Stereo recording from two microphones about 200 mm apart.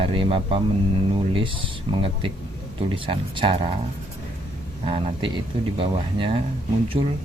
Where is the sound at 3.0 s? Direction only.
25° right (ahead or behind).